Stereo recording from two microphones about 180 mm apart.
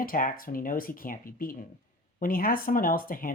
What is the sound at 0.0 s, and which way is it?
Speech, 50° left (ahead or behind).